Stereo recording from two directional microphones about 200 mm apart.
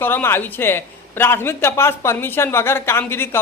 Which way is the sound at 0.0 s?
10° left (ahead or behind).